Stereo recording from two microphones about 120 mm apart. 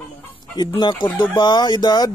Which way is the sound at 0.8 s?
40° left (ahead or behind).